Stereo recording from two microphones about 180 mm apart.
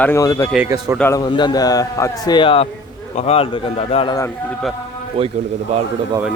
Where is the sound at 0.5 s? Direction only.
15° right (ahead or behind).